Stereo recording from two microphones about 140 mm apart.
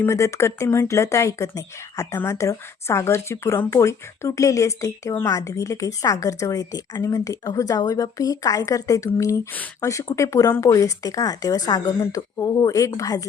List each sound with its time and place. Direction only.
0.0 s speech: 20° left (ahead or behind)